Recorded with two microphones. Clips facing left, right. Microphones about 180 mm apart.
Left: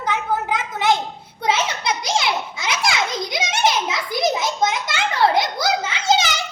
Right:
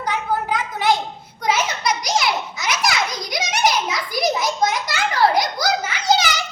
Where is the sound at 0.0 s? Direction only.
25° left (ahead or behind).